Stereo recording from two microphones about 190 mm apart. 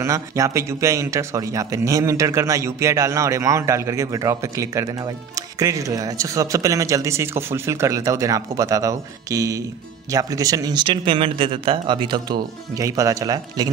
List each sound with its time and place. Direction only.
0.0 s speech: 15° right (ahead or behind)